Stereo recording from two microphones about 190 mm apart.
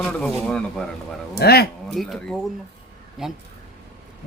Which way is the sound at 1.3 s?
55° left (ahead or behind).